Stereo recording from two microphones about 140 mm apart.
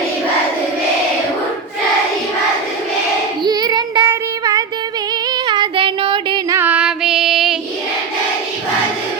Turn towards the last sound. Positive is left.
turn(degrees=0)  # may be behind; listen again after turning